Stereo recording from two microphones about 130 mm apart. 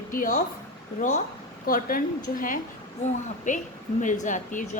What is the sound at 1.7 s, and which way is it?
Speech, 90° left.